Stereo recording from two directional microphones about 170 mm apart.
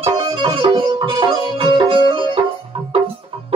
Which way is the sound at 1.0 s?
30° right (ahead or behind).